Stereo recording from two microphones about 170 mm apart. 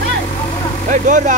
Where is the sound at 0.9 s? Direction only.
45° right (ahead or behind).